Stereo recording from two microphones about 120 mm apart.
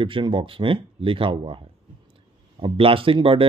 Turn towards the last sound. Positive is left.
turn(degrees=-45)  # may be behind; listen again after turning